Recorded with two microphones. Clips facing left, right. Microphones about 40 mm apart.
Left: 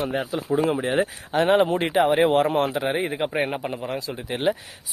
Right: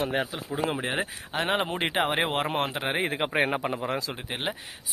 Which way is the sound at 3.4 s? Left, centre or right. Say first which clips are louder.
Even; right.